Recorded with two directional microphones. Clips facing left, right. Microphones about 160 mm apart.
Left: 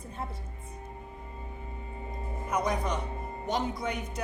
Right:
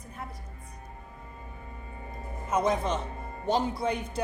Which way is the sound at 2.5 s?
25° right (ahead or behind).